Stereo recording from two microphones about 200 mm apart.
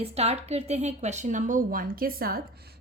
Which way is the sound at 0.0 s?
30° right (ahead or behind).